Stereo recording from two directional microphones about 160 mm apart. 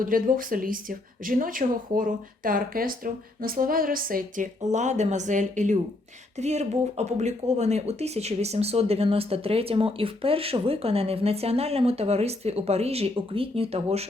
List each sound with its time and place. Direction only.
0.0 s speech: 60° right (ahead or behind); by 14.1 s 40° right (ahead or behind)